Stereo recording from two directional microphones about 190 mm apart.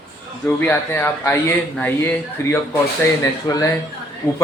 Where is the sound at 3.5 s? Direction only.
20° left (ahead or behind).